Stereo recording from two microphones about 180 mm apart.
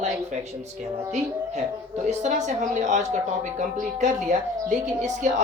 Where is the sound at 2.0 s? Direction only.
40° right (ahead or behind).